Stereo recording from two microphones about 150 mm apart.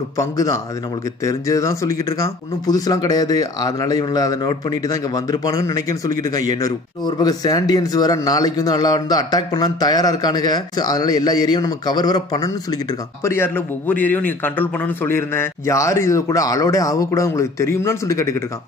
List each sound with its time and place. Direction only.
0.2 s speech: 20° left (ahead or behind)